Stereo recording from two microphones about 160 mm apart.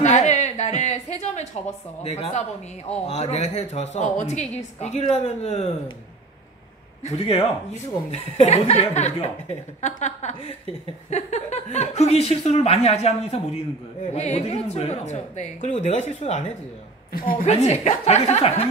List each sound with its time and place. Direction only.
0.0 s a sound: 45° left (ahead or behind)
2.0 s a woman's voice: 40° left (ahead or behind)
7.0 s a woman's voice: 40° left (ahead or behind)
17.1 s a woman's voice: 60° left (ahead or behind)
17.5 s speech: 40° left (ahead or behind)